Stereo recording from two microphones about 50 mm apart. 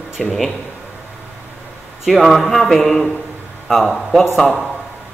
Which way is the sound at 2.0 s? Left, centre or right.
Centre.